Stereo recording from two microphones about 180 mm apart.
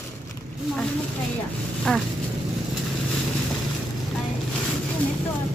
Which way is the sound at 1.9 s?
5° left (ahead or behind).